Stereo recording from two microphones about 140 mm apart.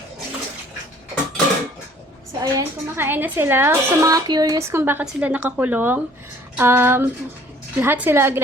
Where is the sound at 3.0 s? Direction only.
15° right (ahead or behind).